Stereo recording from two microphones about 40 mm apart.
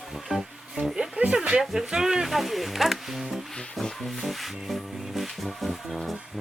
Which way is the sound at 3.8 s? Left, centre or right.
Centre.